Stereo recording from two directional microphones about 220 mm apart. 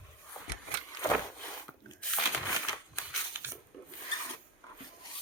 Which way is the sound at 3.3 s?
10° right (ahead or behind).